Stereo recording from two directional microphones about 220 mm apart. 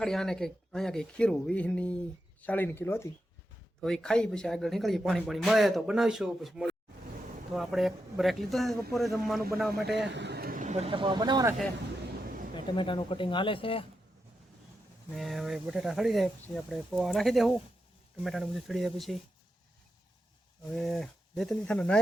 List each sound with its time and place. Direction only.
0.0 s a man's voice: centre (ahead or behind)
10.1 s speech: 50° right (ahead or behind); by 11.5 s 20° right (ahead or behind)
12.5 s speech: 20° left (ahead or behind)
15.1 s a man's voice: centre (ahead or behind)
20.7 s a man's voice: centre (ahead or behind)